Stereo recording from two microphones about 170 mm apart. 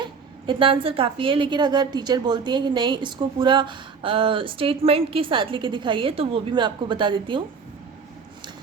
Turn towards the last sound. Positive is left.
turn(degrees=-30)  # may be behind; listen again after turning